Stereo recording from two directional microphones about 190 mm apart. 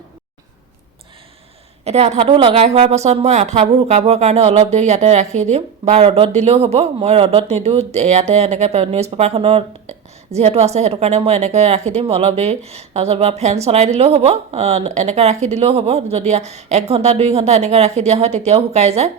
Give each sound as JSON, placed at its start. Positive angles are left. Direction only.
{"t": 1.8, "sound": "a woman's voice", "side_deg": -35}